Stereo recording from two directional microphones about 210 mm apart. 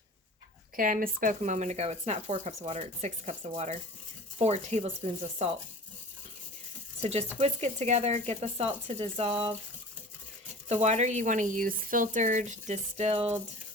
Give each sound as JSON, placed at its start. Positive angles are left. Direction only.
{"t": 0.8, "sound": "speech", "side_deg": -40}
{"t": 7.0, "sound": "speech", "side_deg": -30}
{"t": 10.7, "sound": "speech", "side_deg": -35}